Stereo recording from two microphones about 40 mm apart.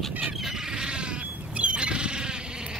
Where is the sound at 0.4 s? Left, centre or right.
Centre.